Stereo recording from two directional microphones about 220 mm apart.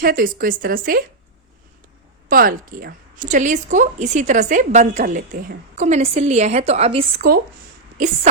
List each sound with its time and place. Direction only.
0.0 s a woman's voice: 40° right (ahead or behind)
2.3 s a woman's voice: 40° right (ahead or behind)